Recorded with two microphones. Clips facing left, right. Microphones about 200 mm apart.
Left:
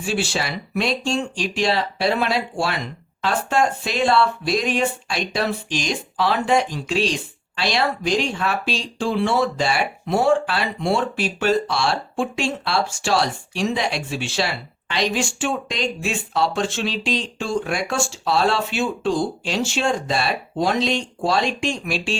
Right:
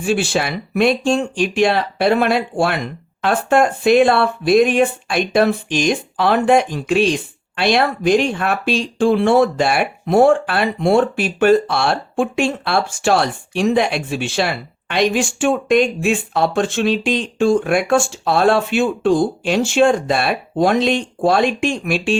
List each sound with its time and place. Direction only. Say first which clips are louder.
0.0 s speech: right 6 dB; 55° right (ahead or behind)